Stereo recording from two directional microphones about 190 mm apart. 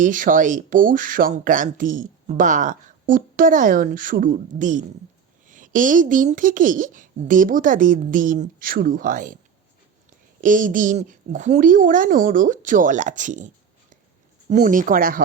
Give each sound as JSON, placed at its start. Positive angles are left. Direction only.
{"t": 0.0, "sound": "speech", "side_deg": -45}
{"t": 10.4, "sound": "speech", "side_deg": -45}
{"t": 14.5, "sound": "speech", "side_deg": -45}